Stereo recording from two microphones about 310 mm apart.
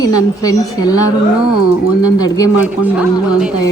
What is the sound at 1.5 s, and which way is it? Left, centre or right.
Speech, left.